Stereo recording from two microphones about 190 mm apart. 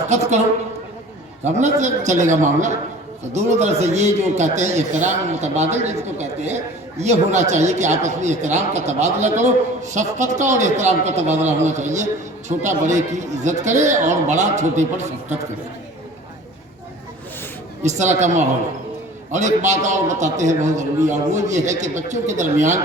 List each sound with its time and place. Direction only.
0.1 s a man's voice: 35° right (ahead or behind)
1.5 s a man's voice: 40° right (ahead or behind)
17.8 s a man's voice: 40° right (ahead or behind)